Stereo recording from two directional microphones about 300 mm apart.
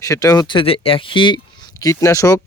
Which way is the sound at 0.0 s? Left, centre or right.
Centre.